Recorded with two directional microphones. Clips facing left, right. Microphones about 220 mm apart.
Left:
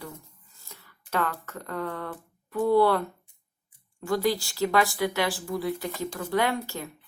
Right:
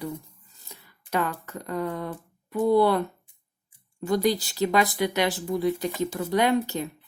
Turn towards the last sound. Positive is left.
turn(degrees=-20)  # may be behind; listen again after turning